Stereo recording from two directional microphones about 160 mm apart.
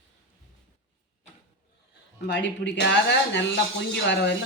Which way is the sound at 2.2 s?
90° left.